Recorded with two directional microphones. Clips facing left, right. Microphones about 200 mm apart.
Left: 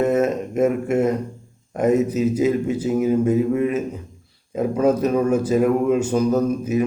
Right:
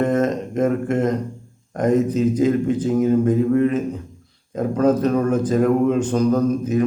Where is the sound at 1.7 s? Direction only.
10° left (ahead or behind).